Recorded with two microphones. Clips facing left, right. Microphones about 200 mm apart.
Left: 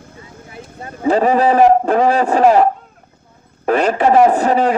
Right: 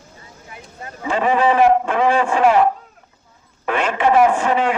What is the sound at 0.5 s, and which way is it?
A man's voice, 30° left (ahead or behind).